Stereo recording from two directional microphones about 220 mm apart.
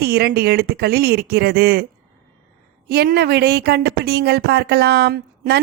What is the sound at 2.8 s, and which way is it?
A woman's voice, 45° right (ahead or behind).